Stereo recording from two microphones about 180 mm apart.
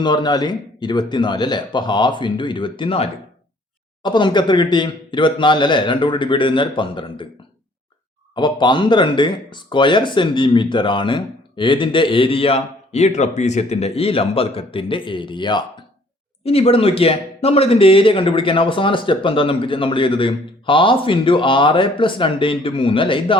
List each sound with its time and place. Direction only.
0.0 s speech: 25° left (ahead or behind)
8.4 s speech: 25° left (ahead or behind)